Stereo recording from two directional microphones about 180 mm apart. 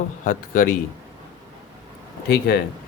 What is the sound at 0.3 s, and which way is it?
Speech, 50° left (ahead or behind).